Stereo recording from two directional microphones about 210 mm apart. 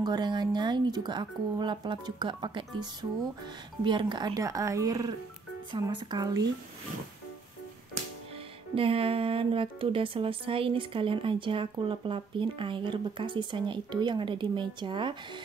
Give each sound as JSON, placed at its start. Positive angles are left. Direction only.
{"t": 0.0, "sound": "speech", "side_deg": -20}
{"t": 8.7, "sound": "speech", "side_deg": -25}